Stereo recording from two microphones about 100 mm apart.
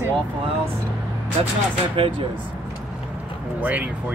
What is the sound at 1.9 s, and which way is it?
Speech, 65° right (ahead or behind).